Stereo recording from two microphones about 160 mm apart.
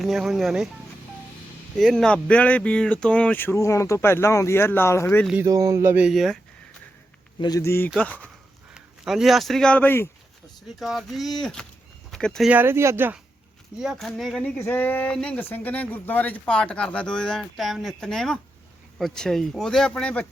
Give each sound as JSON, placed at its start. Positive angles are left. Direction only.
{"t": 0.0, "sound": "speech", "side_deg": 0}
{"t": 1.7, "sound": "speech", "side_deg": 0}
{"t": 5.4, "sound": "speech", "side_deg": -20}
{"t": 6.1, "sound": "speech", "side_deg": 0}
{"t": 7.3, "sound": "a man's voice", "side_deg": 25}
{"t": 8.7, "sound": "speech", "side_deg": 0}
{"t": 10.8, "sound": "speech", "side_deg": 0}
{"t": 12.5, "sound": "speech", "side_deg": -15}
{"t": 13.7, "sound": "speech", "side_deg": 0}
{"t": 14.6, "sound": "speech", "side_deg": 15}